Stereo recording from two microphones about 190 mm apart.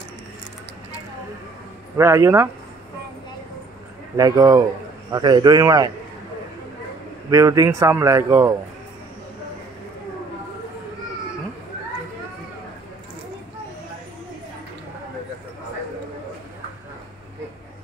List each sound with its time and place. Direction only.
2.0 s a man's voice: 15° right (ahead or behind)
4.2 s a man's voice: 20° right (ahead or behind)
7.2 s a man's voice: 15° right (ahead or behind)